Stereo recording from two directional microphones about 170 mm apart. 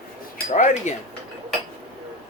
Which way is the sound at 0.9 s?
45° left (ahead or behind).